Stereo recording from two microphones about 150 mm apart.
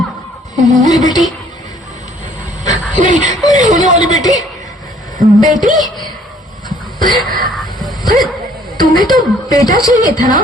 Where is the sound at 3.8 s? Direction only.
55° right (ahead or behind).